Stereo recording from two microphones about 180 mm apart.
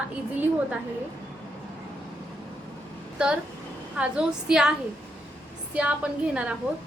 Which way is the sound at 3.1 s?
5° right (ahead or behind).